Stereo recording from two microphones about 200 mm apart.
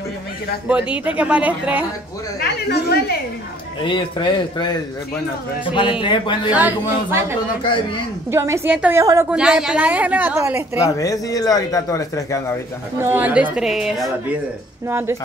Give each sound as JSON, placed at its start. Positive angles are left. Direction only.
{"t": 0.9, "sound": "a woman's voice", "side_deg": -5}
{"t": 2.7, "sound": "a woman's voice", "side_deg": 55}
{"t": 3.8, "sound": "speech", "side_deg": 25}
{"t": 6.5, "sound": "a woman's voice", "side_deg": -10}
{"t": 11.0, "sound": "a man's voice", "side_deg": 15}
{"t": 12.9, "sound": "a woman's voice", "side_deg": -10}
{"t": 14.9, "sound": "a woman's voice", "side_deg": -10}